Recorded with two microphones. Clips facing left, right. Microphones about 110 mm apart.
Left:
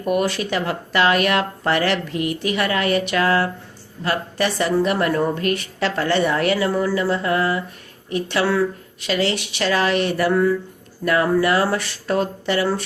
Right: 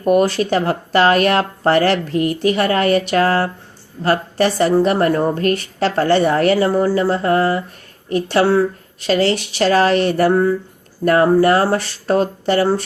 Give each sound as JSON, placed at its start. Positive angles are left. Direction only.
{"t": 0.0, "sound": "a woman's voice", "side_deg": -35}